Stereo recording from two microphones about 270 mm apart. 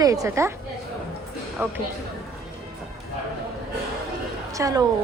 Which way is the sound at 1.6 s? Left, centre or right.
Centre.